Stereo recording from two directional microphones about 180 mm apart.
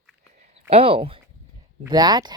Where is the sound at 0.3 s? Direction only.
45° right (ahead or behind).